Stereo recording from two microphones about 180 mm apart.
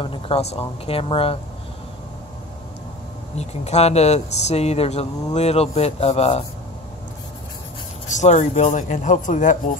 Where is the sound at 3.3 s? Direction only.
35° left (ahead or behind).